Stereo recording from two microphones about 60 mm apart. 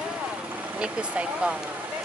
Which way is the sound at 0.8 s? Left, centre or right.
Centre.